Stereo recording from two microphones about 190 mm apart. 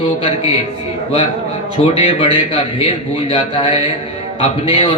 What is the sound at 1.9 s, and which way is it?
A man's voice, 30° left (ahead or behind).